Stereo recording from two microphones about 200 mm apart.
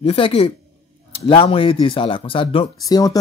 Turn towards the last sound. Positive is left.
turn(degrees=20)  # may be behind; listen again after turning